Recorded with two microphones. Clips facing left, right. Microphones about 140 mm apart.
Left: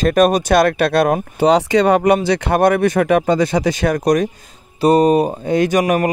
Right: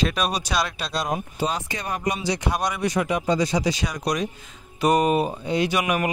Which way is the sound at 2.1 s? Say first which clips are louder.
Left 10 dB; 60° left (ahead or behind).